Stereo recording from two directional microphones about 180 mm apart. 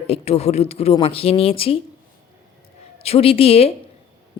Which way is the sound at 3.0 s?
35° left (ahead or behind).